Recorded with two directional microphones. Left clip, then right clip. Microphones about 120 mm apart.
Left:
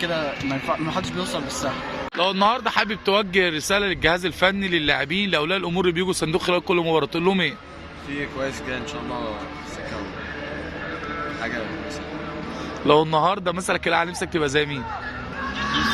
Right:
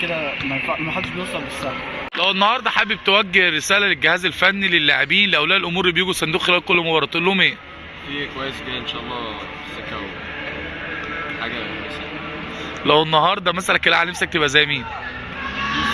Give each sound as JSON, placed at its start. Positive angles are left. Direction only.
{"t": 2.1, "sound": "a man's voice", "side_deg": 20}
{"t": 12.8, "sound": "speech", "side_deg": 15}